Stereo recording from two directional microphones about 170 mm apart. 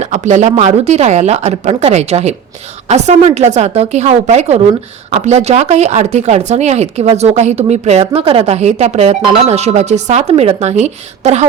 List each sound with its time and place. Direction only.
0.0 s speech: 45° right (ahead or behind)